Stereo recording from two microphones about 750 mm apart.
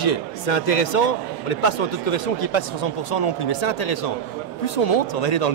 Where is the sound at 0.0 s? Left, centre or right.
Left.